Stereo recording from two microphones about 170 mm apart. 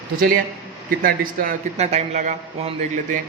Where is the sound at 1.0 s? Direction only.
55° right (ahead or behind).